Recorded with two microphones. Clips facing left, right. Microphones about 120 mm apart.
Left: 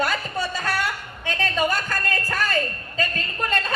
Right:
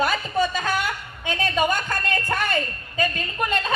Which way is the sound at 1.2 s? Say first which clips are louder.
Right 1 dB; 20° right (ahead or behind).